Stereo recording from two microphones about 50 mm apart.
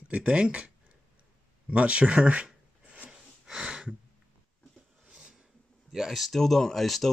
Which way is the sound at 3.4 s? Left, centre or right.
Centre.